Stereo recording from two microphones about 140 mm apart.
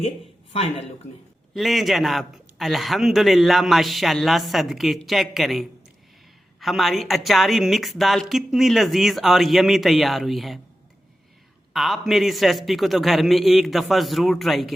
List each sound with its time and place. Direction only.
0.5 s speech: 45° left (ahead or behind)
1.5 s a man's voice: centre (ahead or behind)
11.7 s a man's voice: centre (ahead or behind)